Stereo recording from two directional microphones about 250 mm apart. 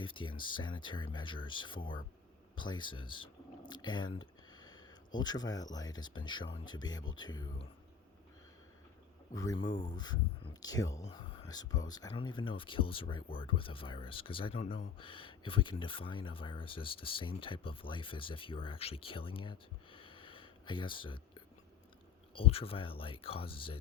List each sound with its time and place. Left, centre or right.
0.0 s speech: centre
9.3 s speech: centre